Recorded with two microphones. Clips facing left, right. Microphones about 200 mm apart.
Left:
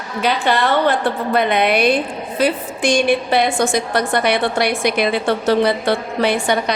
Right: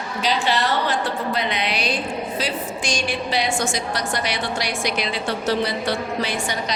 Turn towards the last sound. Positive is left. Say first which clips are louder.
# left 8 dB
turn(degrees=60)  # may be behind; listen again after turning